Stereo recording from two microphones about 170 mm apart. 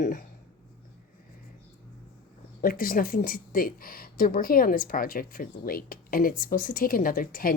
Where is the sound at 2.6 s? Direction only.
55° left (ahead or behind).